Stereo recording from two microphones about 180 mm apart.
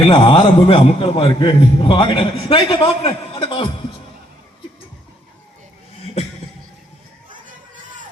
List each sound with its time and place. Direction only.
0.1 s a man's voice: 30° left (ahead or behind)